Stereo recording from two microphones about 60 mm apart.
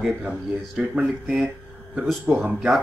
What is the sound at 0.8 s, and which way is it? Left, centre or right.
Speech, right.